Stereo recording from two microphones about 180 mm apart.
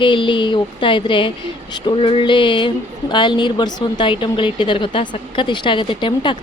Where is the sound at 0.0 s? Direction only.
30° left (ahead or behind).